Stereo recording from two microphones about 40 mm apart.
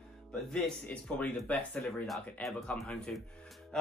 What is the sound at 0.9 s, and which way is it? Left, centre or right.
Speech, left.